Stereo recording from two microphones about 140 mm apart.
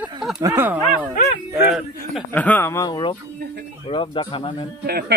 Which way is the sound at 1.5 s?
Centre (ahead or behind).